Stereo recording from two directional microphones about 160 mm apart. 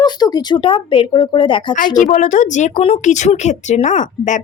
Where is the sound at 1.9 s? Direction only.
50° left (ahead or behind).